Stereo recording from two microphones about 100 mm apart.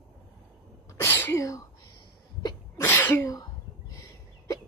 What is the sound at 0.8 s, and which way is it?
Sneeze, 25° left (ahead or behind).